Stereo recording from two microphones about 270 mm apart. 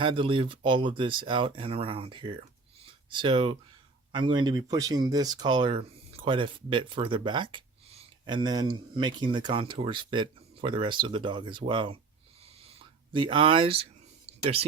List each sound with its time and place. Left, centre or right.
0.0 s speech: centre
2.8 s a sound: centre
4.1 s speech: centre
13.1 s speech: centre